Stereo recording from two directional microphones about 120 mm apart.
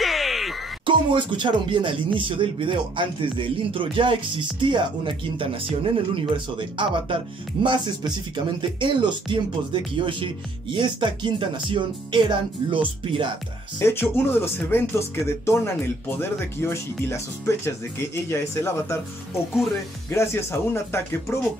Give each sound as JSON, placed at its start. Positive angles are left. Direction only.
{"t": 0.0, "sound": "a sound", "side_deg": 0}
{"t": 0.8, "sound": "speech", "side_deg": -40}
{"t": 13.7, "sound": "speech", "side_deg": 20}
{"t": 20.1, "sound": "speech", "side_deg": 20}